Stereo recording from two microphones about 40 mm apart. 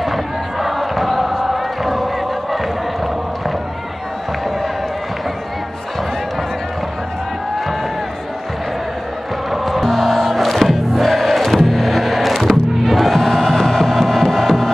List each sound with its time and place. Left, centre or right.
0.0 s basketball bounce: centre
9.5 s music: centre
10.3 s crowd: centre